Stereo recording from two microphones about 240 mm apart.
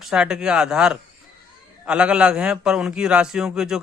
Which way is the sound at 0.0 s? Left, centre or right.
Centre.